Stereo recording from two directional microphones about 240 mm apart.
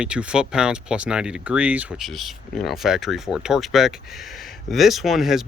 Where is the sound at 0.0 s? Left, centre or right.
Centre.